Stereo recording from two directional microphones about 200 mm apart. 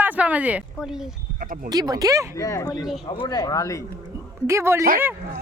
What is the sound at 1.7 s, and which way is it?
Speech, 20° right (ahead or behind).